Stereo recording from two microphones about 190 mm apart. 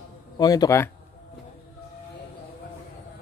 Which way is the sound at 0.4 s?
20° left (ahead or behind).